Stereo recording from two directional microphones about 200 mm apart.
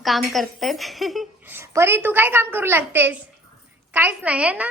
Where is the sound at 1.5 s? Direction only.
15° right (ahead or behind).